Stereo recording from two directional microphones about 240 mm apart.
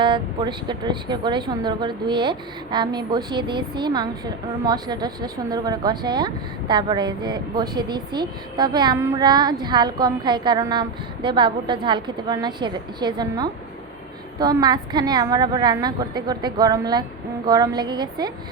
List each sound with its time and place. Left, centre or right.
0.0 s a woman's voice: centre